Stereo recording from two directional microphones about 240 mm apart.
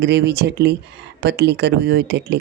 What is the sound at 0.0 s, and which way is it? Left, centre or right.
Speech, right.